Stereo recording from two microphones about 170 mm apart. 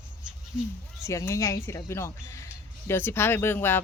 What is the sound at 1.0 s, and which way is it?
Speech, 15° left (ahead or behind).